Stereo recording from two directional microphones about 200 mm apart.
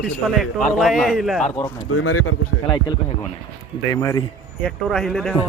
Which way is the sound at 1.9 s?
90° left.